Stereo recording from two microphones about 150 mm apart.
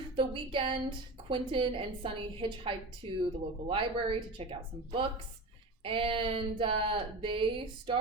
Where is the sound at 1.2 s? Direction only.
35° right (ahead or behind).